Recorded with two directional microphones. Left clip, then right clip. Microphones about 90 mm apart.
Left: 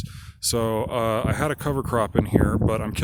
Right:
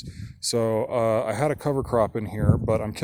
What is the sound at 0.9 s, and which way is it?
Speech, 25° left (ahead or behind).